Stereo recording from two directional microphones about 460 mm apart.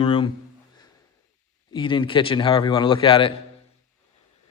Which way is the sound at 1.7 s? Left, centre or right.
Centre.